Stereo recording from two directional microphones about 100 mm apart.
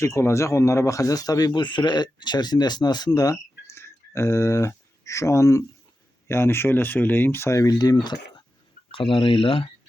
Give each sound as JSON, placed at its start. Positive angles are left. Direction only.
{"t": 0.0, "sound": "speech", "side_deg": 30}
{"t": 3.8, "sound": "a sound", "side_deg": 25}
{"t": 6.2, "sound": "speech", "side_deg": 25}
{"t": 8.9, "sound": "speech", "side_deg": 65}